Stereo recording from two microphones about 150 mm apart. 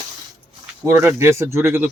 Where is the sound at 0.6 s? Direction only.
15° right (ahead or behind).